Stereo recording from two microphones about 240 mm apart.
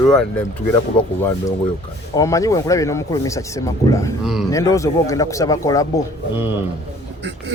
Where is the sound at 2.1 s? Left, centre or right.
Centre.